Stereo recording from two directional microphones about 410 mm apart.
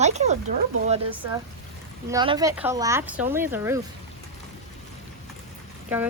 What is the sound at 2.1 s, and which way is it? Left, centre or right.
Speech, centre.